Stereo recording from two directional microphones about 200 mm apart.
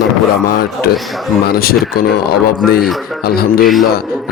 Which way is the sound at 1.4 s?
50° left (ahead or behind).